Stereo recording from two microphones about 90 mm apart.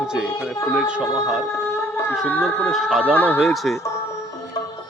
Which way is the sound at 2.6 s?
5° right (ahead or behind).